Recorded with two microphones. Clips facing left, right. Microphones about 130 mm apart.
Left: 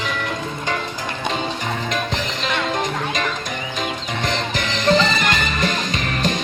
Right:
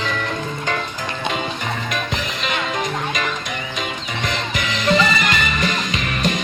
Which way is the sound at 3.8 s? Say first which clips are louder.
Left 3 dB; 35° left (ahead or behind).